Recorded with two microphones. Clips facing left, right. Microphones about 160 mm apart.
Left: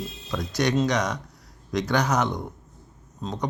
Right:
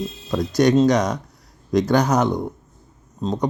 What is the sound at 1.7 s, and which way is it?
Speech, 45° right (ahead or behind).